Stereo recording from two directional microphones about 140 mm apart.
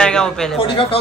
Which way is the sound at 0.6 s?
40° left (ahead or behind).